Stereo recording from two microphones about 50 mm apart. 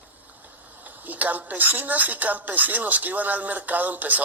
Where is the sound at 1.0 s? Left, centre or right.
Right.